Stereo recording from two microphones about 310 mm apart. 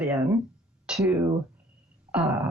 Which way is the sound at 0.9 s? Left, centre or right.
Centre.